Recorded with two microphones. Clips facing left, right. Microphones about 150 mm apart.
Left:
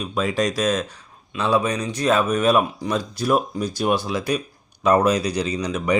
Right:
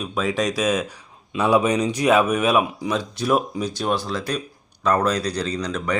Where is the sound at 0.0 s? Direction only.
Centre (ahead or behind).